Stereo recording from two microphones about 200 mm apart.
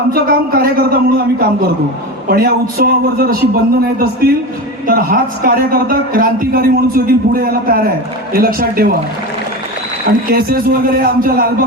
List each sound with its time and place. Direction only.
0.1 s a man's voice: 45° right (ahead or behind)
10.2 s a man's voice: 50° right (ahead or behind)